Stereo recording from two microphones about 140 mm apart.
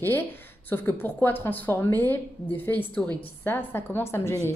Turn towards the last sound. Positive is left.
turn(degrees=20)  # may be behind; listen again after turning